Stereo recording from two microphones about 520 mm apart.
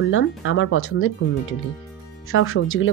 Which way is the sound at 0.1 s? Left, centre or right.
Left.